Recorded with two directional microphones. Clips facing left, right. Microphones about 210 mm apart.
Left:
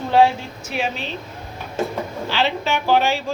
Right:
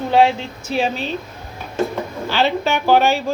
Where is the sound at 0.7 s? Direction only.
35° right (ahead or behind).